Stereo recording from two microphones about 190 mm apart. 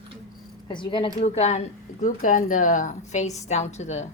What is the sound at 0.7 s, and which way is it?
Speech, 25° left (ahead or behind).